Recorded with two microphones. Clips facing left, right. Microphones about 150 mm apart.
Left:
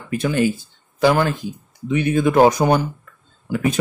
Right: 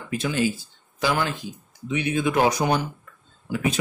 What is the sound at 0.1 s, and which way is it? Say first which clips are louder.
Speech: left 5 dB; 55° left (ahead or behind).